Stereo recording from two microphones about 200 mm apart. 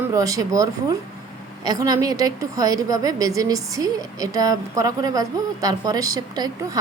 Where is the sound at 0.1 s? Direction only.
15° right (ahead or behind).